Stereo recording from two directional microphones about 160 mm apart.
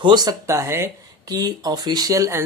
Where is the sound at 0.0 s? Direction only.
25° right (ahead or behind).